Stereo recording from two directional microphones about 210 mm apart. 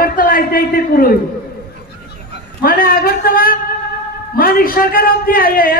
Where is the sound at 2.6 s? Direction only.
45° left (ahead or behind).